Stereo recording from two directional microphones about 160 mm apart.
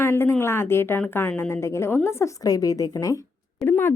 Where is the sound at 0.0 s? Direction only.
15° left (ahead or behind).